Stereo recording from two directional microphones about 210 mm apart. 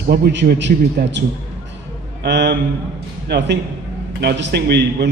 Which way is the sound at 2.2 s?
55° right (ahead or behind).